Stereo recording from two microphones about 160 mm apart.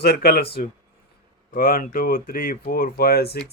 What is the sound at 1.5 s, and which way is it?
Speech, 65° left (ahead or behind).